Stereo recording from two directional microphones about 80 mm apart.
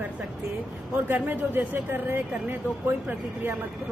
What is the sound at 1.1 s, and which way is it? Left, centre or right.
A woman's voice, right.